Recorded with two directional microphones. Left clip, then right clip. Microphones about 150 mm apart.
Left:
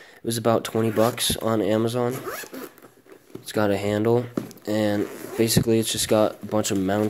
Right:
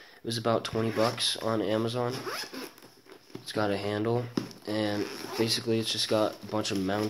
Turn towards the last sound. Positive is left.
turn(degrees=40)  # may be behind; listen again after turning